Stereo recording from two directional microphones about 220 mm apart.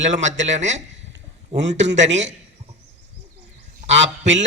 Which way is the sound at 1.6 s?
55° right (ahead or behind).